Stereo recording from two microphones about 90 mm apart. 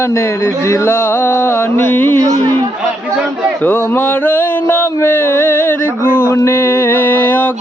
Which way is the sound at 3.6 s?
25° left (ahead or behind).